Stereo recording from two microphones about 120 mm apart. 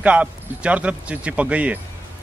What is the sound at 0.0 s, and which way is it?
Speech, 10° right (ahead or behind).